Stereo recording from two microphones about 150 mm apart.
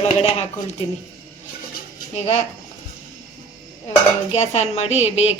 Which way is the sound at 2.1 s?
45° left (ahead or behind).